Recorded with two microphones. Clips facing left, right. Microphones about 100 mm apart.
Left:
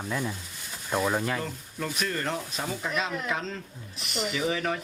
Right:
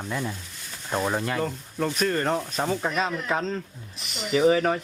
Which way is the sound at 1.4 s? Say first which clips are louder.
Right 6 dB; 45° right (ahead or behind).